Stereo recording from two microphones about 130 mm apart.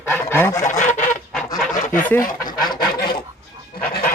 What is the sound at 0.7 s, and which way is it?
Honk, 75° left (ahead or behind).